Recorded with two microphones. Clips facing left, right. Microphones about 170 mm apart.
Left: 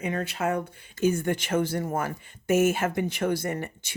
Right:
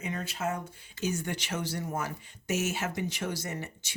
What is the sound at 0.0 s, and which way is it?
Speech, 60° left (ahead or behind).